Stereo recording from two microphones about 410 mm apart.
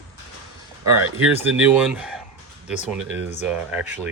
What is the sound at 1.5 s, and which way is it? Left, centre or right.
Speech, centre.